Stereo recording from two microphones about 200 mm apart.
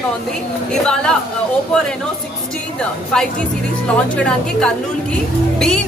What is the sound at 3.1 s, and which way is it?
A woman's voice, 5° left (ahead or behind).